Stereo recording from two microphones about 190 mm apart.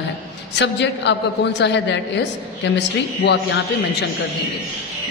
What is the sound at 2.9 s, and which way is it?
Speech, 70° left (ahead or behind).